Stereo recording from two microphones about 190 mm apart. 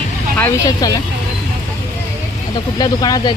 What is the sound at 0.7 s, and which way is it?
Speech, 20° left (ahead or behind).